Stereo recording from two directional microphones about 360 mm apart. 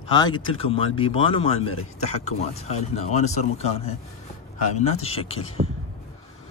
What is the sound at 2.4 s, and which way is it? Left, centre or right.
Speech, centre.